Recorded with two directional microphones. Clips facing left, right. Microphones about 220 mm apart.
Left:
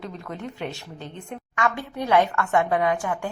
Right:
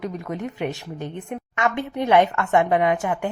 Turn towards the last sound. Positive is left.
turn(degrees=-20)  # may be behind; listen again after turning